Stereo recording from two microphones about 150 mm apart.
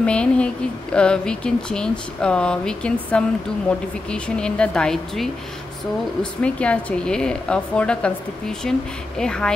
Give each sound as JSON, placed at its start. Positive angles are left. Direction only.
{"t": 0.0, "sound": "a woman's voice", "side_deg": 5}
{"t": 6.4, "sound": "a woman's voice", "side_deg": 10}